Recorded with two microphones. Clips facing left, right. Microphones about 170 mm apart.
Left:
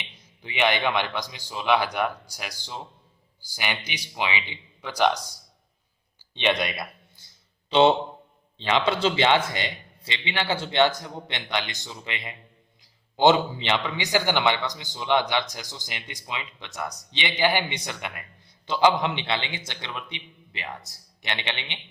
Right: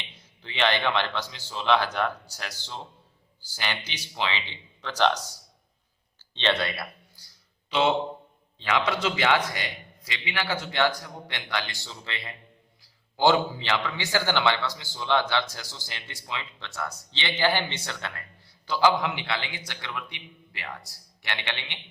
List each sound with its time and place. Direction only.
0.0 s a man's voice: 15° left (ahead or behind)
6.3 s a sound: 15° left (ahead or behind)
8.5 s a man's voice: 25° left (ahead or behind)